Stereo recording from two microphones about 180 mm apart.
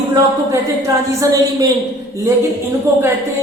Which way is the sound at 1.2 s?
20° right (ahead or behind).